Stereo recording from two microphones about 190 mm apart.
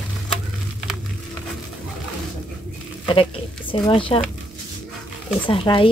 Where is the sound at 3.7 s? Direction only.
25° left (ahead or behind).